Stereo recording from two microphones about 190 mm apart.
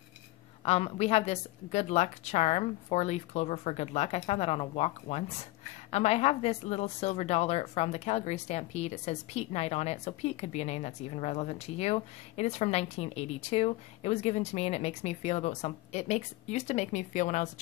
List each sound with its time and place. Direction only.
0.7 s a woman's voice: 30° left (ahead or behind)